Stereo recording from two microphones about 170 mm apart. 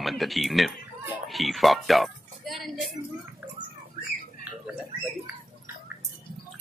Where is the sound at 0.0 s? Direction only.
Centre (ahead or behind).